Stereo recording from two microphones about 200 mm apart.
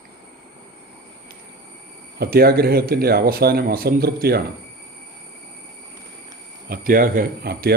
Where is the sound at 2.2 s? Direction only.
50° right (ahead or behind).